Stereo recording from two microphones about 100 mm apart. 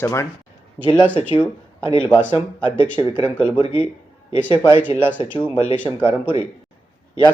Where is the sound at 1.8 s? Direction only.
60° left (ahead or behind).